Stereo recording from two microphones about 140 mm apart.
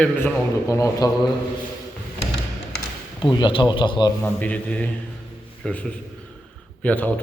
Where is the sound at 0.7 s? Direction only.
25° left (ahead or behind).